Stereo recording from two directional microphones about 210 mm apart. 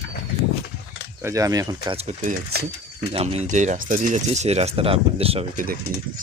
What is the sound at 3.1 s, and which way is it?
Speech, 30° right (ahead or behind).